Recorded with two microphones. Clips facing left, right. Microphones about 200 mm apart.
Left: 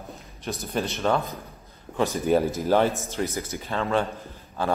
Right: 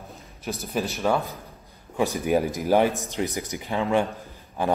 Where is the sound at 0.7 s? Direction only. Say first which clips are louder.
Even; 5° right (ahead or behind).